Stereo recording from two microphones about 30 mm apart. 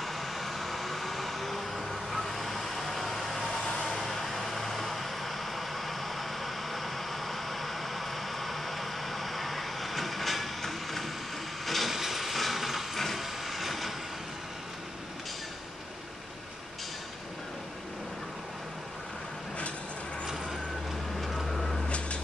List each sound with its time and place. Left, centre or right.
0.0 s vehicle: centre
11.6 s train: centre
21.2 s vehicle: centre
21.8 s a sound: left